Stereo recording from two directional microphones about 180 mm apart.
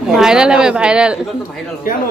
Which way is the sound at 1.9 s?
50° left (ahead or behind).